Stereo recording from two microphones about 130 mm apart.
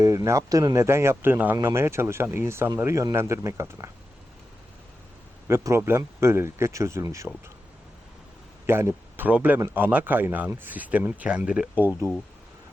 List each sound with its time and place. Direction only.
0.0 s speech: 25° right (ahead or behind)
5.5 s speech: 20° right (ahead or behind)
8.6 s speech: 20° right (ahead or behind)